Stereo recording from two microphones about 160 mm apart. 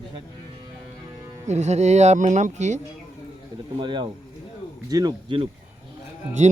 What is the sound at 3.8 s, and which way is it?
A man's voice, 30° right (ahead or behind).